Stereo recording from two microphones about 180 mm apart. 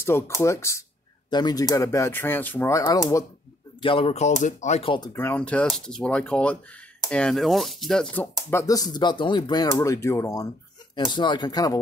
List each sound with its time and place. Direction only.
0.0 s speech: 15° left (ahead or behind)
3.8 s speech: 30° left (ahead or behind)
5.1 s speech: 10° left (ahead or behind)